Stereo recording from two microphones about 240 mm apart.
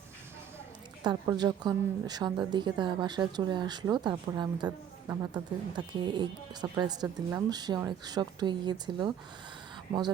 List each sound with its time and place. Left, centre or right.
1.0 s speech: centre